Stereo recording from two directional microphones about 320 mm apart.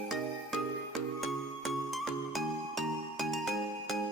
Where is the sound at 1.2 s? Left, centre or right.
Centre.